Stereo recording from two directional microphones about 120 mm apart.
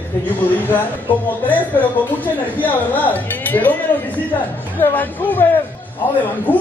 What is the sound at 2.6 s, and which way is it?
Speech, 15° left (ahead or behind).